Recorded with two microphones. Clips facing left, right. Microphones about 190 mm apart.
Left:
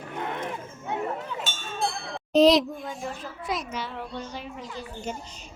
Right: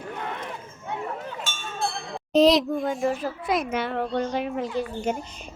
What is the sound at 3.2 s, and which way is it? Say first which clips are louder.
A child's voice: right 6 dB; 55° right (ahead or behind).